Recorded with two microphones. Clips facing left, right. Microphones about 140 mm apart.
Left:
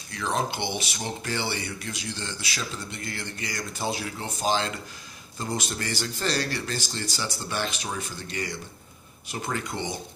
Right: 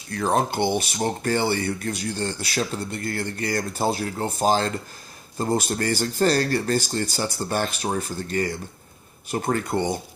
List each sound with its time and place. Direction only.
0.1 s speech: 45° right (ahead or behind)